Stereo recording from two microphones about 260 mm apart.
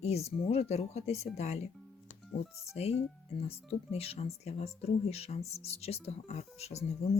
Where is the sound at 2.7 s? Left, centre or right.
Left.